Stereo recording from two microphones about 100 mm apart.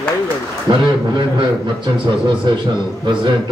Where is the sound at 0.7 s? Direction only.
40° right (ahead or behind).